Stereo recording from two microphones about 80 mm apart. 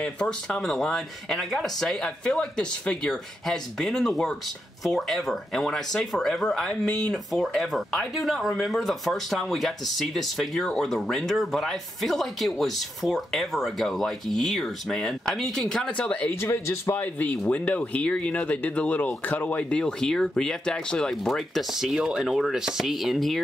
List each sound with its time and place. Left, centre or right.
0.0 s speech: centre
16.3 s a man's voice: left
17.5 s speech: centre